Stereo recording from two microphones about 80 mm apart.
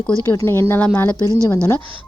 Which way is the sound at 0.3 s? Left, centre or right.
Left.